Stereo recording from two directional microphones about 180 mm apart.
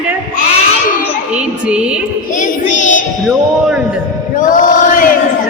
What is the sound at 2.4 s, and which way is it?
Child singing, 45° left (ahead or behind).